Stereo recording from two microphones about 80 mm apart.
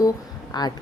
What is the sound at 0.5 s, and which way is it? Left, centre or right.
Speech, left.